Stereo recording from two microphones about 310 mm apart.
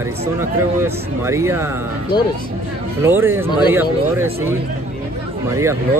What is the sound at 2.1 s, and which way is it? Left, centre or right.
Speech, centre.